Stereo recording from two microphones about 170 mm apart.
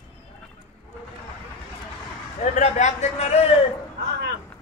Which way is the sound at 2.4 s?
45° left (ahead or behind).